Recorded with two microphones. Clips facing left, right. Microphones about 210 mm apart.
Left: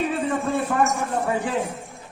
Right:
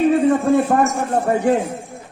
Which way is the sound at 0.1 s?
45° right (ahead or behind).